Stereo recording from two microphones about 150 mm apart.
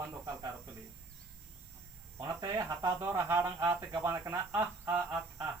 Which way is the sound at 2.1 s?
20° right (ahead or behind).